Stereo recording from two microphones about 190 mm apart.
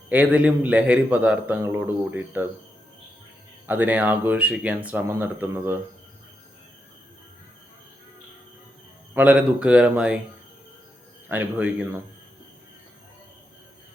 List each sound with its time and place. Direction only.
0.1 s a man's voice: 5° right (ahead or behind)
3.7 s a man's voice: 10° right (ahead or behind)
9.1 s speech: 5° right (ahead or behind)
11.3 s a man's voice: 10° right (ahead or behind)